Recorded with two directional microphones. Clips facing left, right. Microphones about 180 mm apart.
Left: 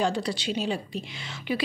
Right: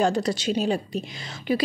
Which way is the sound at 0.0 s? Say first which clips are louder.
Right 4 dB; 45° right (ahead or behind).